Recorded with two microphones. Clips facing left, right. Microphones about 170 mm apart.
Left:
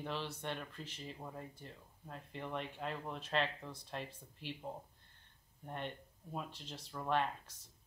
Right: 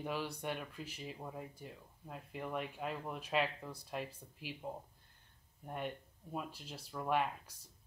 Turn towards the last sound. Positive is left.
turn(degrees=-10)  # may be behind; listen again after turning